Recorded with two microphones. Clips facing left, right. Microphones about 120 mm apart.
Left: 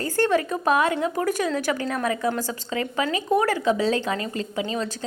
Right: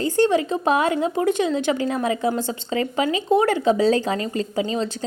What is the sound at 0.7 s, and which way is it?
A woman's voice, 30° right (ahead or behind).